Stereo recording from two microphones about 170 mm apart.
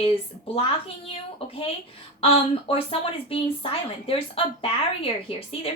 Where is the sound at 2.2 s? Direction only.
35° left (ahead or behind).